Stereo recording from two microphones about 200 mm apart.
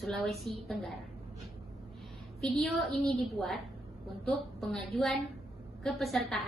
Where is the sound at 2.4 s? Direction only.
Centre (ahead or behind).